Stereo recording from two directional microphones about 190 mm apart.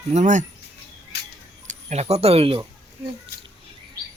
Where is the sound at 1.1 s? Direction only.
60° left (ahead or behind).